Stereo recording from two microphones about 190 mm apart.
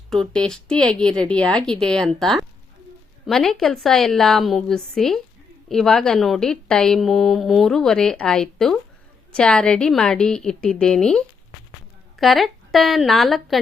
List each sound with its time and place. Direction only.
0.1 s a woman's voice: 5° left (ahead or behind)